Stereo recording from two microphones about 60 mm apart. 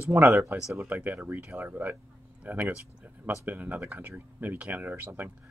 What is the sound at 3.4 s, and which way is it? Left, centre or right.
Speech, right.